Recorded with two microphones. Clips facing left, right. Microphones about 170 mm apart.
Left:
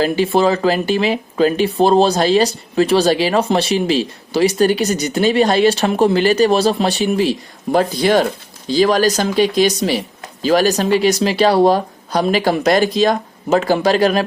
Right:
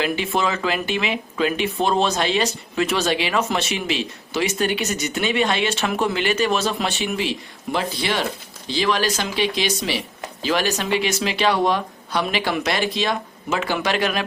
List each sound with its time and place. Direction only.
0.0 s speech: 35° left (ahead or behind)